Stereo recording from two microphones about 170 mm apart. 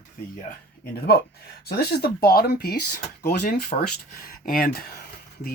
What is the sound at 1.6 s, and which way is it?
Speech, 70° left (ahead or behind).